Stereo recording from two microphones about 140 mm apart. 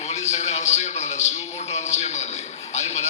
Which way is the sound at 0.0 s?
55° left (ahead or behind).